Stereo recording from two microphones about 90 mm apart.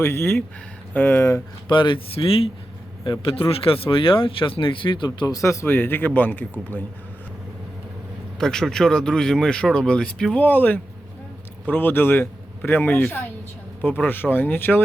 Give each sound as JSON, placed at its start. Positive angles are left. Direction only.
{"t": 0.0, "sound": "a man's voice", "side_deg": 25}
{"t": 1.6, "sound": "speech", "side_deg": 65}
{"t": 3.0, "sound": "speech", "side_deg": 75}
{"t": 5.2, "sound": "a man's voice", "side_deg": 40}
{"t": 8.4, "sound": "a man's voice", "side_deg": 5}